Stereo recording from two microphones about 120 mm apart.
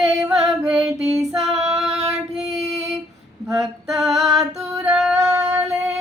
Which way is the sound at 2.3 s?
5° right (ahead or behind).